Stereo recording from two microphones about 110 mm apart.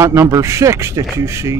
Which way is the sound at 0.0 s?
25° right (ahead or behind).